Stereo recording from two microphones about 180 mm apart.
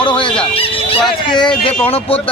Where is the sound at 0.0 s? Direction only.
25° left (ahead or behind).